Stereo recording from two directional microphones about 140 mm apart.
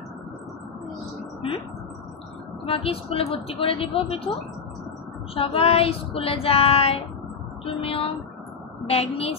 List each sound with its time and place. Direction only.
2.6 s child singing: 45° left (ahead or behind)
5.3 s child singing: 45° left (ahead or behind)
7.6 s speech: 40° left (ahead or behind)
8.8 s child singing: 45° left (ahead or behind)